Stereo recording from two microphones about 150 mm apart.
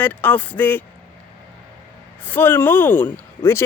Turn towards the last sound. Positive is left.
turn(degrees=15)  # may be behind; listen again after turning